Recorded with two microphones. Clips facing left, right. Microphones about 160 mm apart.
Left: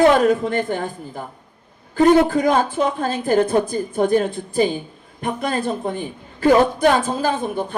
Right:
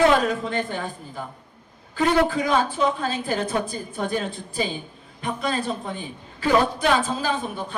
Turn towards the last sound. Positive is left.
turn(degrees=50)  # may be behind; listen again after turning